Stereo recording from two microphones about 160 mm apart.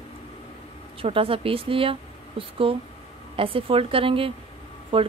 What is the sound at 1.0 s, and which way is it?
Speech, 35° right (ahead or behind).